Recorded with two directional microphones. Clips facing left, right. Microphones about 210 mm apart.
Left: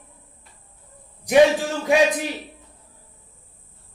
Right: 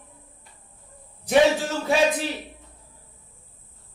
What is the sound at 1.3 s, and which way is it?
Speech, 15° left (ahead or behind).